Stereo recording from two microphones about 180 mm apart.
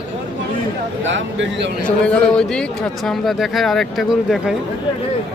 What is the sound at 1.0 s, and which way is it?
Speech, 90° right.